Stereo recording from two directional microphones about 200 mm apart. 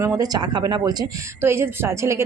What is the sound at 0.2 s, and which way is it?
A woman's voice, 20° right (ahead or behind).